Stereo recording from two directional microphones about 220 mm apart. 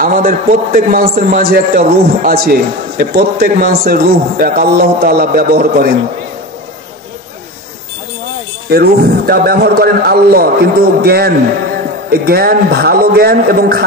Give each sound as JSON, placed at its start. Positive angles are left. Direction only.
{"t": 0.0, "sound": "a man's voice", "side_deg": -35}
{"t": 8.6, "sound": "a man's voice", "side_deg": -45}